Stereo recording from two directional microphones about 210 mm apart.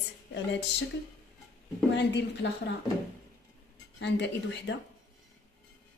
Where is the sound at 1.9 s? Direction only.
55° left (ahead or behind).